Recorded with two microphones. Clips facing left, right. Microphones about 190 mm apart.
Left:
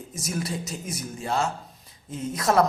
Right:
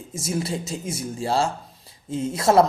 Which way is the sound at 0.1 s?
25° right (ahead or behind).